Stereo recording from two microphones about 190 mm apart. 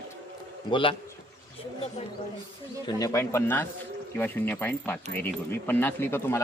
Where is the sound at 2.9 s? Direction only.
20° left (ahead or behind).